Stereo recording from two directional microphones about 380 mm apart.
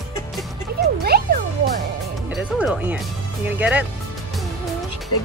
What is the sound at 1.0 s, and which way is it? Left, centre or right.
Music, right.